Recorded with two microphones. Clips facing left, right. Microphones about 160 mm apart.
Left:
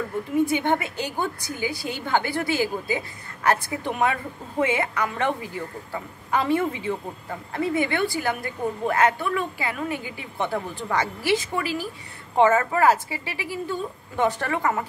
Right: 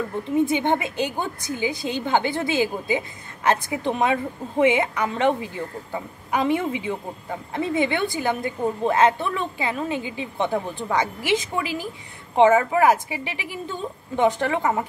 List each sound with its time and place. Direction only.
0.5 s a woman's voice: 20° right (ahead or behind)